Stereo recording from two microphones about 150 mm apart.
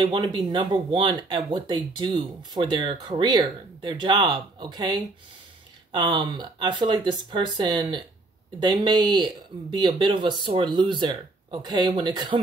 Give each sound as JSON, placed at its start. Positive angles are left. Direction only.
{"t": 0.1, "sound": "speech", "side_deg": -30}